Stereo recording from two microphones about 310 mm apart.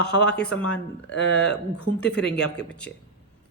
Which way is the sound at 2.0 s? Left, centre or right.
Centre.